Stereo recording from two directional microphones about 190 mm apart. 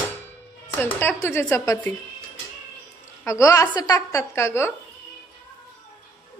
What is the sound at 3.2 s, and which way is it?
A woman's voice, 15° left (ahead or behind).